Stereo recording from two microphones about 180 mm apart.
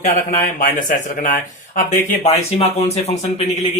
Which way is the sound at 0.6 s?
50° left (ahead or behind).